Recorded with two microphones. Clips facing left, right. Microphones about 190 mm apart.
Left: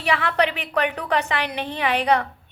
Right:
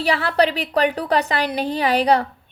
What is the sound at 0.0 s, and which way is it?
A woman's voice, 35° right (ahead or behind).